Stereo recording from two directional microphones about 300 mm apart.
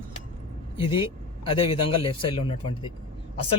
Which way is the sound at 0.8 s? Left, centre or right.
Centre.